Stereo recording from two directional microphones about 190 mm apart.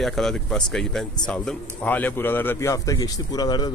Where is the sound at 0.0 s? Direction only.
Centre (ahead or behind).